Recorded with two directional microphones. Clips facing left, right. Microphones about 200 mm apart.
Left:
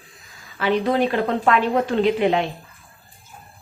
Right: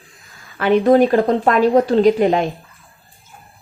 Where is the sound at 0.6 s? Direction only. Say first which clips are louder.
Right 7 dB; 50° right (ahead or behind).